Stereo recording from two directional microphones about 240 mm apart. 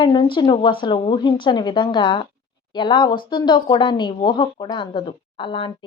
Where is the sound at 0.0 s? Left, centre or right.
Centre.